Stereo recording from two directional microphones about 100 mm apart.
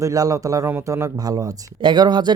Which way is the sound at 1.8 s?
50° right (ahead or behind).